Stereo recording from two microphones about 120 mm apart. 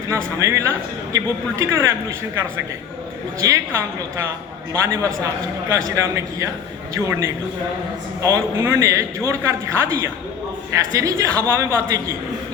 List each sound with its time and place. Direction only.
0.1 s a man's voice: 25° right (ahead or behind)
3.4 s a man's voice: 25° right (ahead or behind)